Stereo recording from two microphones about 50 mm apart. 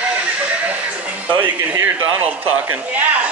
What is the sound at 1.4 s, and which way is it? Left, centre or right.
A man's voice, right.